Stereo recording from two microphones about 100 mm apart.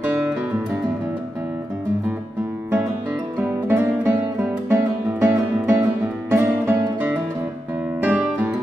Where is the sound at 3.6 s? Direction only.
20° right (ahead or behind).